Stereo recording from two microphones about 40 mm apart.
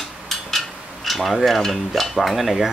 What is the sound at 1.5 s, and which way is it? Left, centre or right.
Dishes, centre.